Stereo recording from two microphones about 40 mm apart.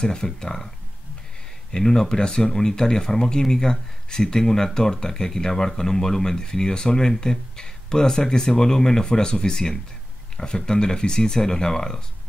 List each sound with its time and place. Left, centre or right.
0.0 s speech: centre
1.7 s speech: centre